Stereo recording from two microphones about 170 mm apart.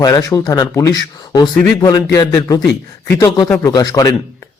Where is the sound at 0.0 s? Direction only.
20° left (ahead or behind).